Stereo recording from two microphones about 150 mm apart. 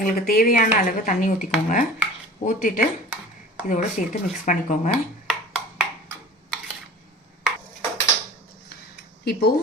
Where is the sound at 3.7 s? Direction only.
55° left (ahead or behind).